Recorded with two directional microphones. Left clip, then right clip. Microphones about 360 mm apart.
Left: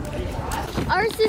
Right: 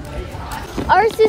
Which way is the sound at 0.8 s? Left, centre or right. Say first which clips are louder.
Right 8 dB; centre.